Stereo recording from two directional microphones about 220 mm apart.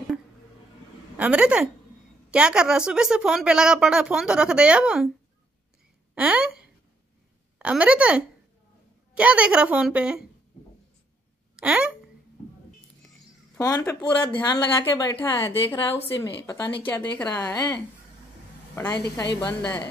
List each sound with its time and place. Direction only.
1.1 s a woman's voice: 5° right (ahead or behind)
6.1 s a woman's voice: 5° right (ahead or behind)
11.5 s speech: 5° right (ahead or behind)
13.6 s a woman's voice: 15° left (ahead or behind)
18.8 s a woman's voice: 10° left (ahead or behind)